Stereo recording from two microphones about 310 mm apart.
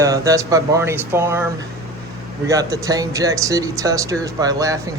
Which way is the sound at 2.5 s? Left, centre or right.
Centre.